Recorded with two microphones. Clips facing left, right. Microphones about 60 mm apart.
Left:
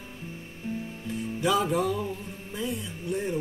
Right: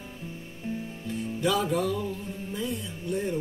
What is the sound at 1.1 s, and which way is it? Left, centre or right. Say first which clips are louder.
Music: left 1 dB; centre.